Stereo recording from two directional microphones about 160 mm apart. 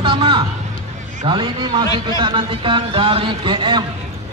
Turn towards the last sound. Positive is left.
turn(degrees=-30)  # may be behind; listen again after turning